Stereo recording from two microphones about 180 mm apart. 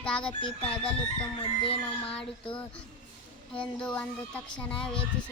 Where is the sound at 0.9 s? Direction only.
30° left (ahead or behind).